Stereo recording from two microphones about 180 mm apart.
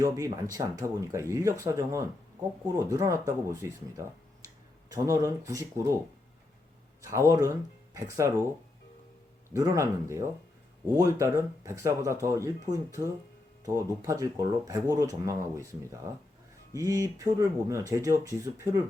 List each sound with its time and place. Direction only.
0.0 s speech: 20° right (ahead or behind)
5.0 s speech: 15° right (ahead or behind)
7.1 s speech: 15° right (ahead or behind)
9.5 s speech: 20° right (ahead or behind)